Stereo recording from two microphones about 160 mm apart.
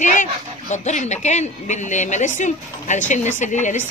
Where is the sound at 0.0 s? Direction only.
50° left (ahead or behind).